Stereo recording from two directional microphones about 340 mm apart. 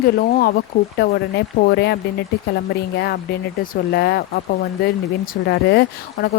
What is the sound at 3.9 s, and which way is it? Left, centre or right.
Speech, left.